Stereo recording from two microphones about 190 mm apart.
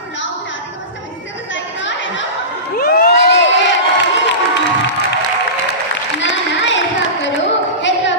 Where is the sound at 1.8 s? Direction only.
75° left (ahead or behind).